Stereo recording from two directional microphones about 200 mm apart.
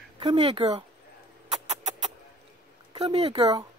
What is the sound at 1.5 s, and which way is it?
Music, 35° right (ahead or behind).